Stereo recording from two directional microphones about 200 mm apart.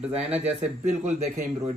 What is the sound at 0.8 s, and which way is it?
Speech, 35° right (ahead or behind).